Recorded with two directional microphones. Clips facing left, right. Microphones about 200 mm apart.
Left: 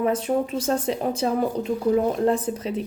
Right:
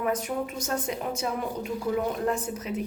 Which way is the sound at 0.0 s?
30° left (ahead or behind).